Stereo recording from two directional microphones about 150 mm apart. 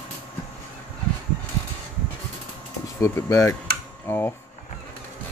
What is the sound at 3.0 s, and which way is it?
Speech, 20° left (ahead or behind).